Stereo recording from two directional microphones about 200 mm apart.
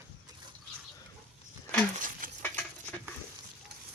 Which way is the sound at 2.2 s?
45° right (ahead or behind).